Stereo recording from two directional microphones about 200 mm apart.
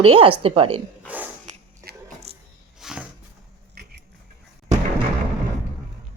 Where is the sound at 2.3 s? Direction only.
30° right (ahead or behind).